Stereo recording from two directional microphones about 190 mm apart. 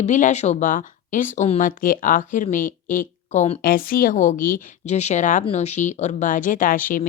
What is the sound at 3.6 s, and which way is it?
A woman's voice, 50° left (ahead or behind).